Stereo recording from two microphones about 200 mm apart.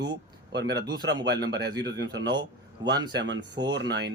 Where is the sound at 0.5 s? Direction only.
60° right (ahead or behind).